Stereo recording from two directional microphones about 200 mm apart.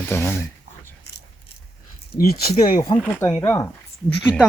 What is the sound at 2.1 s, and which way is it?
Speech, 50° left (ahead or behind).